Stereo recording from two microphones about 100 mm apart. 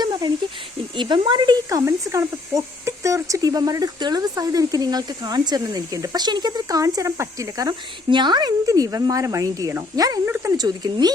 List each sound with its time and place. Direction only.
0.0 s a sound: 45° right (ahead or behind)
0.9 s speech: 50° right (ahead or behind)
1.8 s speech: 30° right (ahead or behind)
8.1 s speech: 50° right (ahead or behind)